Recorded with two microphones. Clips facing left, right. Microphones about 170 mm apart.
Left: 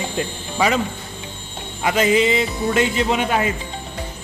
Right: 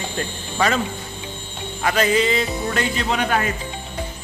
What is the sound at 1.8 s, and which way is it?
A man's voice, 20° left (ahead or behind).